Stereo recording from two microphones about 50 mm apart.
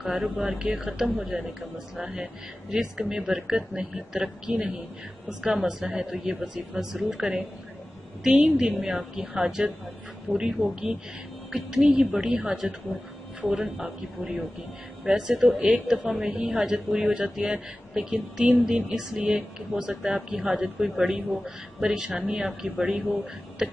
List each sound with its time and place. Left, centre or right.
0.0 s speech: centre
15.4 s speech: right
16.1 s speech: centre